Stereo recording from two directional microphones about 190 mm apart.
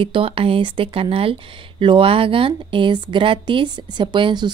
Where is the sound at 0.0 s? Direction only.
30° right (ahead or behind).